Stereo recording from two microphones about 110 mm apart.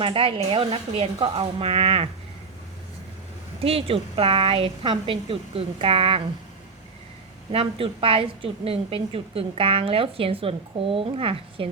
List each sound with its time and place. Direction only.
0.0 s a woman's voice: 55° right (ahead or behind)
3.6 s a woman's voice: 60° right (ahead or behind)
7.5 s a woman's voice: 55° right (ahead or behind)